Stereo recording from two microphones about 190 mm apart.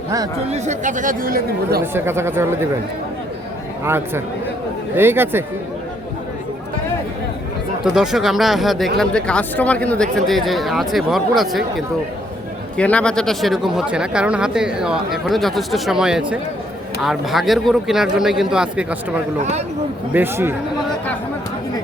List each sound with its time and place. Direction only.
0.5 s speech: 40° right (ahead or behind)
1.8 s speech: 10° right (ahead or behind)
3.8 s speech: 10° right (ahead or behind)
7.9 s speech: 5° right (ahead or behind)
12.7 s speech: 5° left (ahead or behind)
19.4 s speech: 35° right (ahead or behind)
20.1 s speech: 10° right (ahead or behind)